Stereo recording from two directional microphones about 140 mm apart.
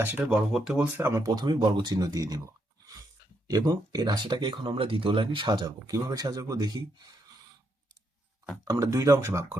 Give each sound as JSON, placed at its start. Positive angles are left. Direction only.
{"t": 0.0, "sound": "speech", "side_deg": -15}
{"t": 3.4, "sound": "speech", "side_deg": -30}
{"t": 8.6, "sound": "speech", "side_deg": -25}